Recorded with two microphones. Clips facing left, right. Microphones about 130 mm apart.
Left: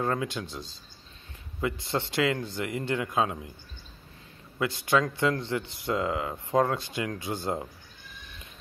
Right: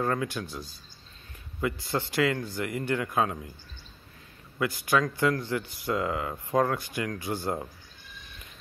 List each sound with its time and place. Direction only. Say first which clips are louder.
0.0 s speech: even; 25° left (ahead or behind)
4.6 s speech: left 1 dB; 25° left (ahead or behind)